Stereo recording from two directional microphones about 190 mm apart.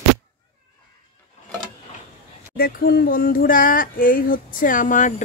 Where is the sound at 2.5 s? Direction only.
50° left (ahead or behind).